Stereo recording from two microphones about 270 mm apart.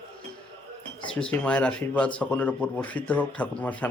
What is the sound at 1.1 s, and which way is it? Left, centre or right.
Speech, centre.